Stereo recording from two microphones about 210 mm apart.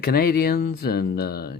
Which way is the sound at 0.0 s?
45° left (ahead or behind).